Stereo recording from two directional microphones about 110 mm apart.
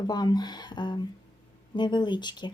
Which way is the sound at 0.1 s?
40° left (ahead or behind).